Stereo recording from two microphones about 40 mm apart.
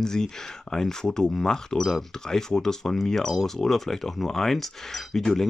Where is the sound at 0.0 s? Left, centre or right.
Centre.